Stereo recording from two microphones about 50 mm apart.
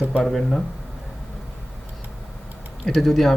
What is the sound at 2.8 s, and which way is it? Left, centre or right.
Speech, centre.